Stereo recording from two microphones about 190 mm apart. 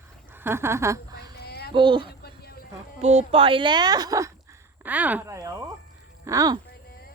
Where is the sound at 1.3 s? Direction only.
55° left (ahead or behind).